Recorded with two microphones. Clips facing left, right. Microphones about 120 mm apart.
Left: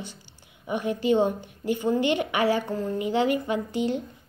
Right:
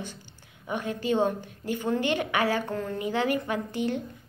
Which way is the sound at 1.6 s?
45° right (ahead or behind).